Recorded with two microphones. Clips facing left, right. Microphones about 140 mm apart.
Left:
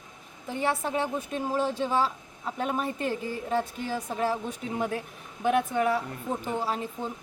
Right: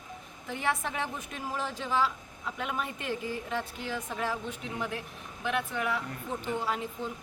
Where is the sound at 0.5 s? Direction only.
30° left (ahead or behind).